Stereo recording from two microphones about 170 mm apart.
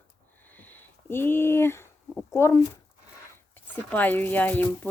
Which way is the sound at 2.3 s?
15° left (ahead or behind).